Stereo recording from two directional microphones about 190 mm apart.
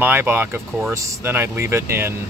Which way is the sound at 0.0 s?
10° right (ahead or behind).